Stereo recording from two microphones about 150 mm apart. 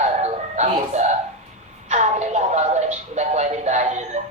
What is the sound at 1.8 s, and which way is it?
Speech, 50° right (ahead or behind).